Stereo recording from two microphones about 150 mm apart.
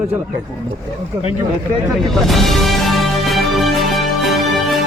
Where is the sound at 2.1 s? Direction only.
Centre (ahead or behind).